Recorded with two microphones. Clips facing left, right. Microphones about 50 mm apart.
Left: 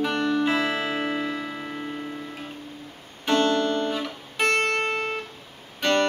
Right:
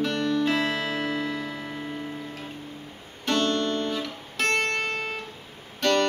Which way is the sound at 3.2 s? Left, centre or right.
Left.